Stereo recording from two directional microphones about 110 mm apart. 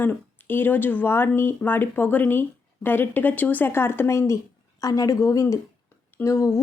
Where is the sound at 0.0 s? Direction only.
20° left (ahead or behind).